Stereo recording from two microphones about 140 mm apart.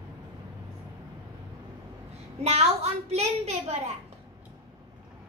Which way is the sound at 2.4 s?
50° right (ahead or behind).